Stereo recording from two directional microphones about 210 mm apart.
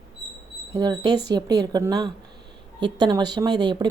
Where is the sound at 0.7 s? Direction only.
20° right (ahead or behind).